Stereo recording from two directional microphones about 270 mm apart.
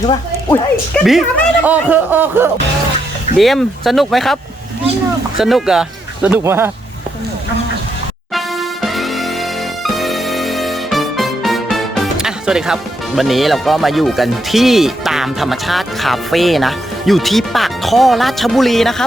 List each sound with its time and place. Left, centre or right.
0.1 s speech: centre
0.9 s speech: centre
5.4 s speech: centre
8.3 s music: centre